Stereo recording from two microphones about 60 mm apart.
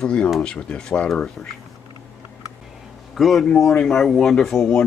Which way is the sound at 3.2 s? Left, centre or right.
Centre.